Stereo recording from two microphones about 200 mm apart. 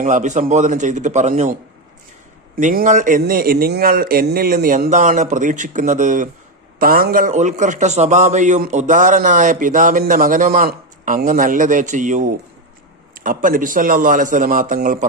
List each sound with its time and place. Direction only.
0.0 s a man's voice: 40° right (ahead or behind)
2.6 s a man's voice: 40° right (ahead or behind)